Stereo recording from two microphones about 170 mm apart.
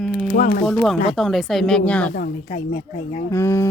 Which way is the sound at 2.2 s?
70° left (ahead or behind).